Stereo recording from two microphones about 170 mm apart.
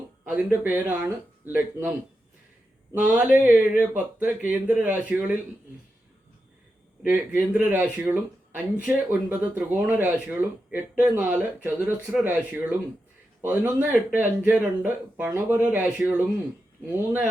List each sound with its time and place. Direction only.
0.3 s speech: 10° right (ahead or behind)
2.9 s speech: 10° right (ahead or behind)
7.0 s speech: 10° right (ahead or behind)